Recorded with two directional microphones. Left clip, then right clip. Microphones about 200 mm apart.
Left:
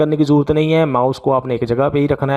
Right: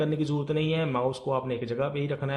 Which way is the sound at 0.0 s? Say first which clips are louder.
Left 14 dB; 45° left (ahead or behind).